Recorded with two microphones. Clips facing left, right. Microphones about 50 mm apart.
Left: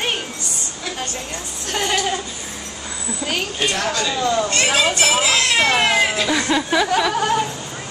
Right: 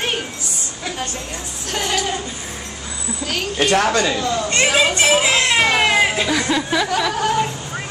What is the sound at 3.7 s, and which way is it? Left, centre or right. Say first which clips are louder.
Speech: right 10 dB; right.